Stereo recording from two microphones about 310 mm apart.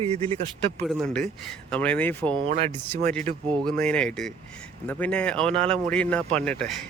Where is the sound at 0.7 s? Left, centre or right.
Centre.